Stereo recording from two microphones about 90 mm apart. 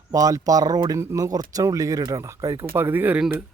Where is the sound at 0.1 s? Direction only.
40° right (ahead or behind).